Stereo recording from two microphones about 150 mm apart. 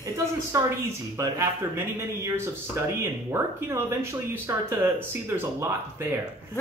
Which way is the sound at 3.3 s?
15° right (ahead or behind).